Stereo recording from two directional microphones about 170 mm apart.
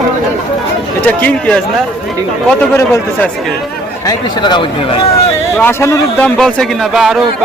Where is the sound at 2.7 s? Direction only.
15° left (ahead or behind).